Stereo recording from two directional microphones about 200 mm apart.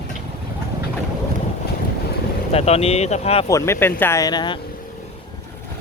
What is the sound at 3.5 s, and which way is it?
Speech, 15° left (ahead or behind).